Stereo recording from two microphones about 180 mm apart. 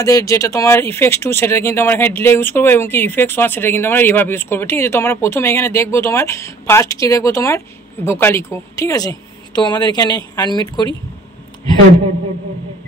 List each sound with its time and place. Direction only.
0.0 s speech: 20° left (ahead or behind)